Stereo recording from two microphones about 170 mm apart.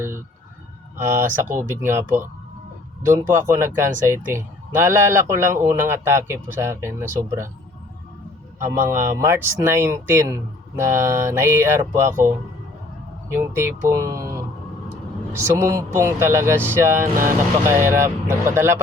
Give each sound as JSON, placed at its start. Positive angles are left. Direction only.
{"t": 0.9, "sound": "speech", "side_deg": -15}
{"t": 8.6, "sound": "speech", "side_deg": -15}
{"t": 13.3, "sound": "speech", "side_deg": -15}